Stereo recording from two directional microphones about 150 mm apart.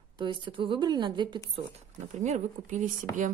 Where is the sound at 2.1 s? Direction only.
50° right (ahead or behind).